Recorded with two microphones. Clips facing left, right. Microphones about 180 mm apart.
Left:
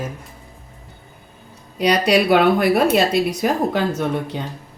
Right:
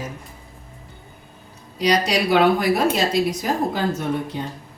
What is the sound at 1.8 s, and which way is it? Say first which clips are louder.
Speech: left 3 dB; 60° left (ahead or behind).